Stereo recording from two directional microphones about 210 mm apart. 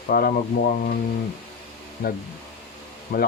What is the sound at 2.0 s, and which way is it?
Speech, 45° left (ahead or behind).